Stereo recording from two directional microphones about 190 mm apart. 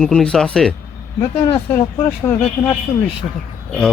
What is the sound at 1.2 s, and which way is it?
Speech, 25° left (ahead or behind).